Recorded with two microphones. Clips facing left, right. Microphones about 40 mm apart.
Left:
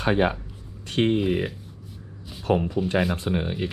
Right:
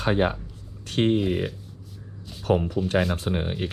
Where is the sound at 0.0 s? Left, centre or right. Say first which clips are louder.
Left 1 dB; left.